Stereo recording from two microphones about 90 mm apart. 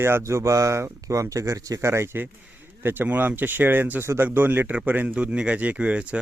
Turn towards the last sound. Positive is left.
turn(degrees=-15)  # may be behind; listen again after turning